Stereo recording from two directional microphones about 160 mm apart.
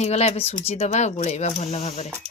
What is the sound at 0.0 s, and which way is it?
Speech, 40° left (ahead or behind).